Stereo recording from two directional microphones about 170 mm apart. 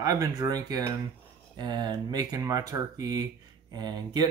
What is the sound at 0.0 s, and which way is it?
Speech, 20° right (ahead or behind).